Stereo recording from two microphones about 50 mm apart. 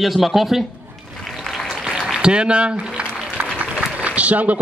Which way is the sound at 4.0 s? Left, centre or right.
Right.